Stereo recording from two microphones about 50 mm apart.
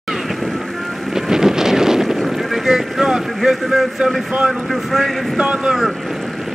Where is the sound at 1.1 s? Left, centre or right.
Centre.